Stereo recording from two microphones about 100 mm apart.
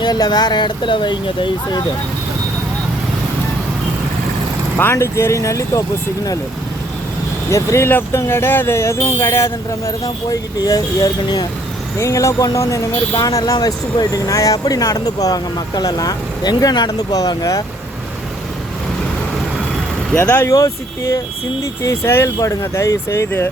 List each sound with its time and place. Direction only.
0.0 s speech: 45° left (ahead or behind)
4.8 s speech: 25° left (ahead or behind)
7.5 s speech: 30° left (ahead or behind)
10.2 s speech: 40° left (ahead or behind)
20.1 s speech: 15° left (ahead or behind)
20.4 s speech: 35° left (ahead or behind)